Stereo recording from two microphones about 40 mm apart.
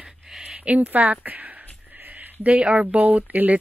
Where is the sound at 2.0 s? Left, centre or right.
Right.